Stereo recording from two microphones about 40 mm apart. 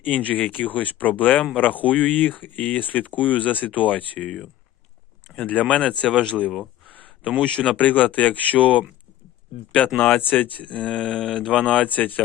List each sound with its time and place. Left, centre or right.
0.3 s speech: left
5.3 s speech: left
6.8 s a sound: left
7.4 s speech: left
7.8 s speech: left
10.7 s speech: left
11.9 s speech: left